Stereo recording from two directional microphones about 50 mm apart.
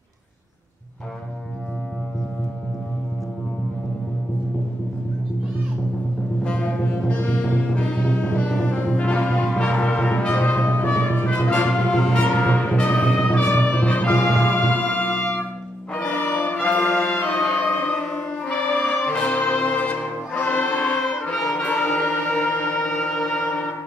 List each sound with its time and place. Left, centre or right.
6.4 s music: left
7.4 s brass instrument: left
11.2 s brass instrument: left
11.9 s music: centre
12.8 s brass instrument: left
13.5 s music: left
16.1 s brass instrument: left
17.3 s music: left